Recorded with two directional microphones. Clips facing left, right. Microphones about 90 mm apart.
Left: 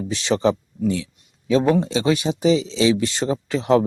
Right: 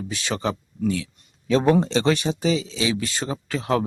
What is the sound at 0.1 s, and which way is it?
A man's voice, 25° left (ahead or behind).